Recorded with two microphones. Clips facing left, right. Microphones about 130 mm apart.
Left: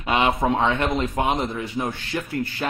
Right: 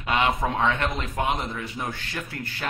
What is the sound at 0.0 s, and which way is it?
Speech, 20° left (ahead or behind).